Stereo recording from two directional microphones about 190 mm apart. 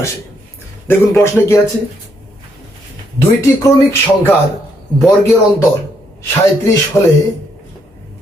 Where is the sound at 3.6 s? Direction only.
15° left (ahead or behind).